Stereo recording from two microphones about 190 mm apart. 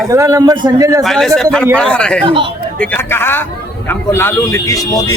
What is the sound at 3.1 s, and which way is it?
Speech, 10° left (ahead or behind).